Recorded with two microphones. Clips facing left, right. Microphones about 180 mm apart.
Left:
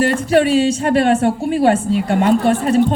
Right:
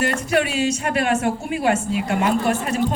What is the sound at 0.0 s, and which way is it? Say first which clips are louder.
Speech: left 7 dB; 30° left (ahead or behind).